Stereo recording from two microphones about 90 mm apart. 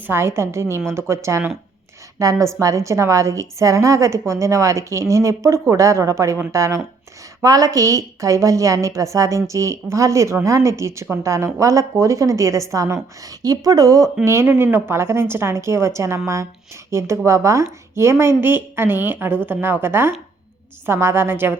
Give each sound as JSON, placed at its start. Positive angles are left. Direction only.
{"t": 0.1, "sound": "a woman's voice", "side_deg": -25}
{"t": 14.3, "sound": "a woman's voice", "side_deg": -30}